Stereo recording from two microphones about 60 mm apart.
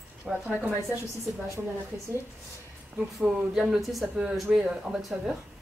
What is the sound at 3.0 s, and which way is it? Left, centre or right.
Speech, centre.